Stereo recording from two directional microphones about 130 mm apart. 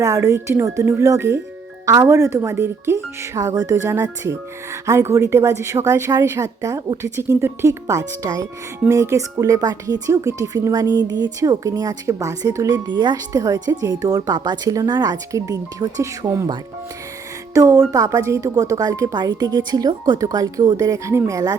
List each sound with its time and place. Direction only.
0.0 s speech: 25° right (ahead or behind)